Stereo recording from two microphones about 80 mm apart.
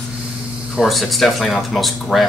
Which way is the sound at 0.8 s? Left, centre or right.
Centre.